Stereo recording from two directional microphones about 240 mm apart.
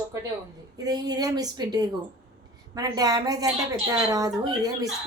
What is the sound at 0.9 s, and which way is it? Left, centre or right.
A woman's voice, centre.